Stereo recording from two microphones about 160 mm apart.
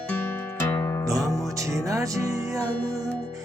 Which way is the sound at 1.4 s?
20° right (ahead or behind).